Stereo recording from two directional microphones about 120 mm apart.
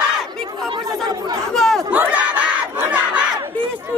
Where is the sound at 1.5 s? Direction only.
5° left (ahead or behind).